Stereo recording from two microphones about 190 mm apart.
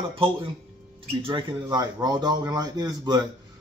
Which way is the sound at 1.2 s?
20° right (ahead or behind).